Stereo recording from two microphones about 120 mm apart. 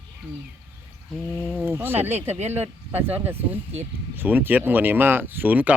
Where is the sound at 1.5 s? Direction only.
20° right (ahead or behind).